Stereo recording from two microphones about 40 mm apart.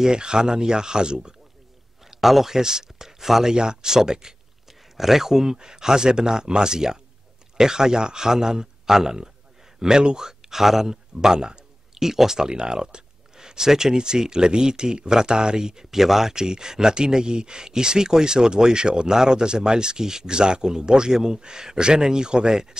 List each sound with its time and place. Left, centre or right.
0.0 s speech: right
2.0 s speech: centre